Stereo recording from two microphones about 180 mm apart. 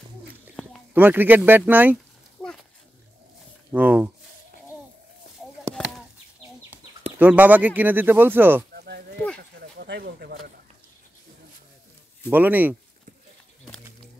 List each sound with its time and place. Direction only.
0.9 s speech: 10° right (ahead or behind)
3.7 s speech: 10° right (ahead or behind)
7.2 s speech: 10° right (ahead or behind)
8.7 s a sound: 60° right (ahead or behind)
12.3 s speech: 10° right (ahead or behind)